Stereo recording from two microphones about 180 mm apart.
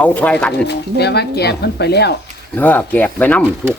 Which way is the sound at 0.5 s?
70° left (ahead or behind).